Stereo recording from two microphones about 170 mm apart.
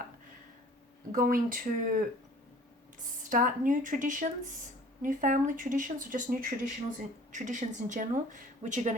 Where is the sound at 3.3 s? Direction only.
50° right (ahead or behind).